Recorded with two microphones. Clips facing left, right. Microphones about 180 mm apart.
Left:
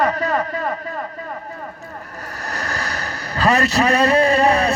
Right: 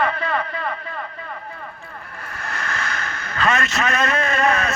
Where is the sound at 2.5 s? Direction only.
40° left (ahead or behind).